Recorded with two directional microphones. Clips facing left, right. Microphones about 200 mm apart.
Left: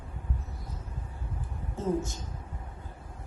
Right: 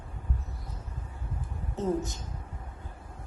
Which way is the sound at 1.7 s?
15° right (ahead or behind).